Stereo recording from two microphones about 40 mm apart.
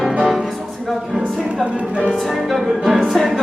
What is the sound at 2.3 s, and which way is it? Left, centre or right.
Music, centre.